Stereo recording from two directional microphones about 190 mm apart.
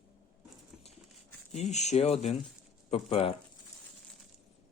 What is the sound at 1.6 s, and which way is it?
Speech, 35° left (ahead or behind).